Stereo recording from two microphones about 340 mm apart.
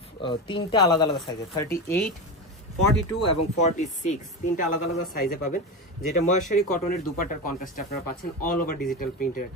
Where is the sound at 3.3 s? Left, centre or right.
Left.